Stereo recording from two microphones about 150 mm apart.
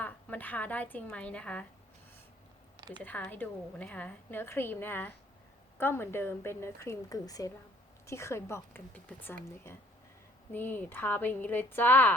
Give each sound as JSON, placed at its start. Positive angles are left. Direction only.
{"t": 0.0, "sound": "a woman's voice", "side_deg": 10}
{"t": 2.7, "sound": "a sound", "side_deg": -30}
{"t": 3.0, "sound": "a woman's voice", "side_deg": 10}